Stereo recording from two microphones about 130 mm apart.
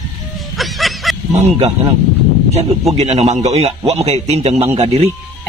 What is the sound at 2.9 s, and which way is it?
A man's voice, 50° right (ahead or behind).